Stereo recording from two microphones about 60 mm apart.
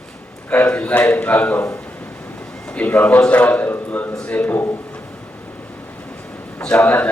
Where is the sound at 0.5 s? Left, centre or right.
Left.